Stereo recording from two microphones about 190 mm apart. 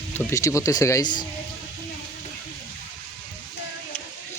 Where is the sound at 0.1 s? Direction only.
10° left (ahead or behind).